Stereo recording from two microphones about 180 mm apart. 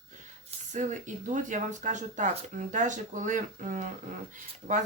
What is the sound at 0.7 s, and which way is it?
Speech, 45° right (ahead or behind).